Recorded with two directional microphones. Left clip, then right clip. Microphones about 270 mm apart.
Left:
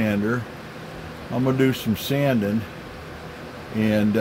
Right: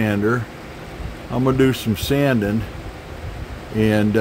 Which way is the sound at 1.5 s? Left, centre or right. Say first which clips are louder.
Right 4 dB; centre.